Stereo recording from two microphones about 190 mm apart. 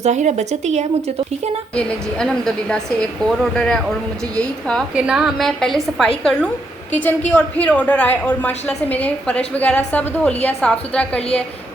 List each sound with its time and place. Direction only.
0.0 s speech: 35° right (ahead or behind)
1.7 s a woman's voice: 5° left (ahead or behind)